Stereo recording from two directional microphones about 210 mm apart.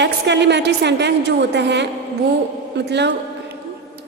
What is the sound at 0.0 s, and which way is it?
A woman's voice, 55° right (ahead or behind).